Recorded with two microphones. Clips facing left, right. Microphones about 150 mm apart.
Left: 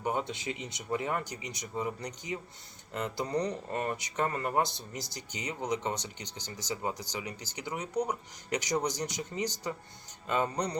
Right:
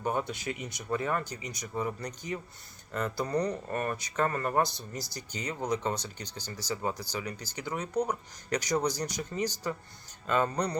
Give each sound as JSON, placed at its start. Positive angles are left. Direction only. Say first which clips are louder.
{"t": 0.0, "sound": "speech", "louder": "right 1 dB", "side_deg": 20}